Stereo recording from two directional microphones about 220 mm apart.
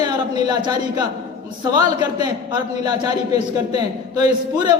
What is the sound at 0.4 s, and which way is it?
A man's voice, 20° right (ahead or behind).